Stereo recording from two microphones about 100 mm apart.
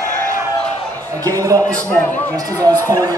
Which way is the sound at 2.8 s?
35° right (ahead or behind).